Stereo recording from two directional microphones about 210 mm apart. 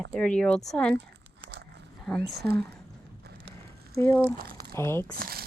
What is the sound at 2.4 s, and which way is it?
Speech, 50° right (ahead or behind).